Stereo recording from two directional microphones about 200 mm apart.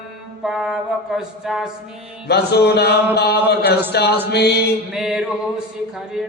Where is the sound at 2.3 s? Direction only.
55° left (ahead or behind).